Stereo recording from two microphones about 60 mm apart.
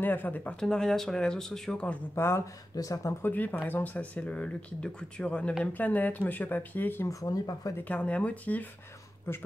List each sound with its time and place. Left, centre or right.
0.0 s speech: left
0.6 s speech: centre
2.1 s speech: left
2.7 s speech: left
3.2 s speech: left
5.6 s speech: left
7.1 s speech: left
7.9 s speech: left